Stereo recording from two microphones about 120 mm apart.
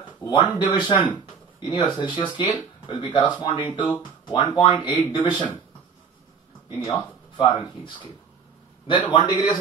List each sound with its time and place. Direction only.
0.3 s speech: 40° left (ahead or behind)
6.8 s speech: 35° left (ahead or behind)